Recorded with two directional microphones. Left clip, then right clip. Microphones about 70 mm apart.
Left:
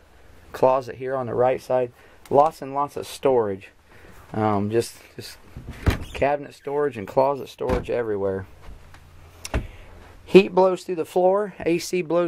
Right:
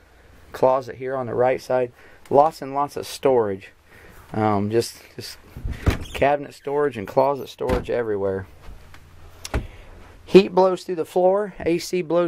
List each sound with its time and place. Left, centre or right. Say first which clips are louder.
0.5 s speech: even; centre; by 5.4 s right
6.1 s speech: right 3 dB; right; by 8.5 s centre
9.4 s a sound: right 1 dB; centre
10.2 s speech: right 1 dB; centre